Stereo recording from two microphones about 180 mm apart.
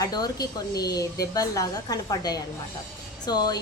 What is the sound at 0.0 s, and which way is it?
Speech, 20° left (ahead or behind).